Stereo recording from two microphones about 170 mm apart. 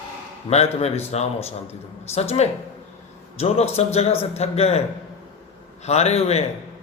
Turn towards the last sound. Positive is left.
turn(degrees=40)  # may be behind; listen again after turning